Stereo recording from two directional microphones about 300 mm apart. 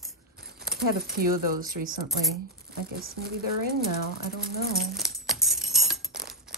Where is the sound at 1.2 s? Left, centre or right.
Right.